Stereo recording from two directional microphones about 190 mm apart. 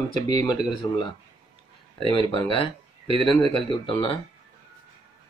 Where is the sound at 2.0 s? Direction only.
25° left (ahead or behind).